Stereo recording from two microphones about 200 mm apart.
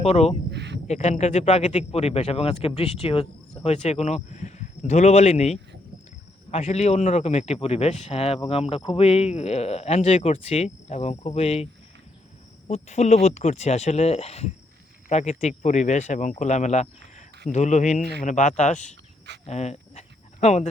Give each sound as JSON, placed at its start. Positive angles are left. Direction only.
{"t": 0.0, "sound": "speech", "side_deg": 30}
{"t": 0.5, "sound": "cricket", "side_deg": -60}
{"t": 0.9, "sound": "speech", "side_deg": 35}
{"t": 19.5, "sound": "a sound", "side_deg": 35}